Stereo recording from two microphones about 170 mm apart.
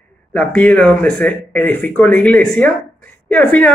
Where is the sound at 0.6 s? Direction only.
10° left (ahead or behind).